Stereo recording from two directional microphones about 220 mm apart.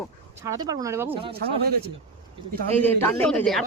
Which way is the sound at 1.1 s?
25° right (ahead or behind).